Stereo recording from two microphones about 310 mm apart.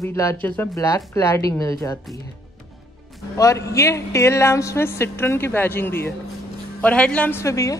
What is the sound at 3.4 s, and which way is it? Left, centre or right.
A woman's voice, centre.